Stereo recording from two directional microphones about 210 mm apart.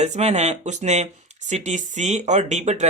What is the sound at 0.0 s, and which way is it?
Speech, 30° right (ahead or behind).